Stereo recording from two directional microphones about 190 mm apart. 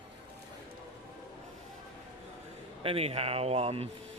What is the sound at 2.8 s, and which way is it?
Speech, 30° right (ahead or behind).